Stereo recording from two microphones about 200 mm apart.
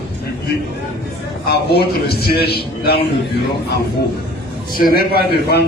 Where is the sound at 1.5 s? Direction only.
50° left (ahead or behind).